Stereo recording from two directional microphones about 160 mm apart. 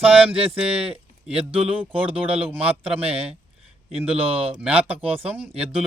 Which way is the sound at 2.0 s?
10° right (ahead or behind).